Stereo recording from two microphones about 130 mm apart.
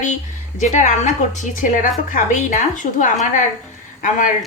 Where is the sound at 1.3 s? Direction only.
80° left.